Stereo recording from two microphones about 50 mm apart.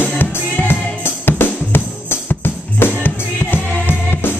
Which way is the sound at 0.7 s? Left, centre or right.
Left.